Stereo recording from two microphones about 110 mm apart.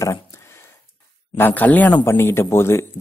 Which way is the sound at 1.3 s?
15° left (ahead or behind).